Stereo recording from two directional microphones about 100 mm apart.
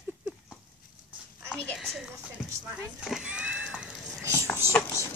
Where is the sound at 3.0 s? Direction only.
5° right (ahead or behind).